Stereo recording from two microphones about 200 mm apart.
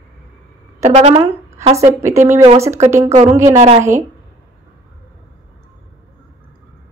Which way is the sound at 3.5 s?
30° right (ahead or behind).